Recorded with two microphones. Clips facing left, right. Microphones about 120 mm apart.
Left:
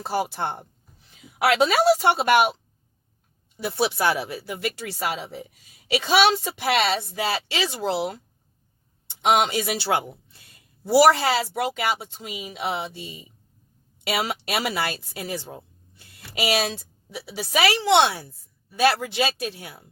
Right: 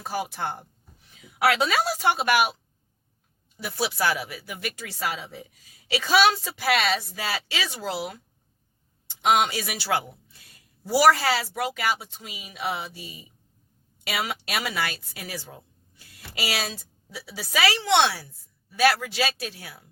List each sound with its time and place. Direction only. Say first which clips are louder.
0.0 s speech: left 4 dB; 35° left (ahead or behind)
3.6 s speech: left 4 dB; 25° left (ahead or behind)
9.2 s a woman's voice: left 2 dB; 30° left (ahead or behind)